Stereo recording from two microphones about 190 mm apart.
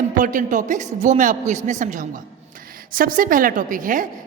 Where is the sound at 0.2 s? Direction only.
45° right (ahead or behind).